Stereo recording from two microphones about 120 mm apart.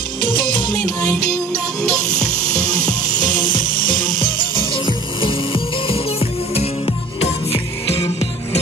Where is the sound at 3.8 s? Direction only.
40° left (ahead or behind).